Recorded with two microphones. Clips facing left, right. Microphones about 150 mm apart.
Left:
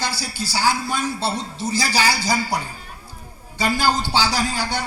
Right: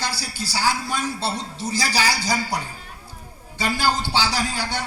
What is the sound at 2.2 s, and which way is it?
Speech, 30° left (ahead or behind).